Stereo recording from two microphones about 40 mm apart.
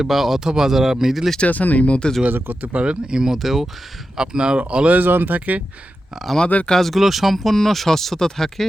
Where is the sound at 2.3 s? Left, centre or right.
Right.